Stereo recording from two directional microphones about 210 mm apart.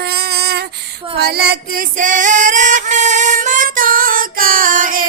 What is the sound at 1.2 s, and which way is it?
Music, 50° right (ahead or behind).